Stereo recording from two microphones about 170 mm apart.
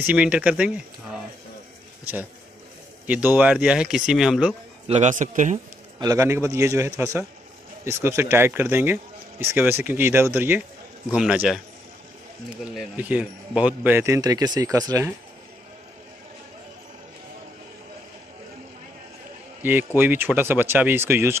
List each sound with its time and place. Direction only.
0.0 s speech: 10° right (ahead or behind)
3.1 s speech: 10° right (ahead or behind)
4.8 s a man's voice: 40° right (ahead or behind)
5.9 s speech: 20° right (ahead or behind); by 11.6 s 5° right (ahead or behind)
12.7 s speech: 10° right (ahead or behind)
19.6 s speech: 10° right (ahead or behind)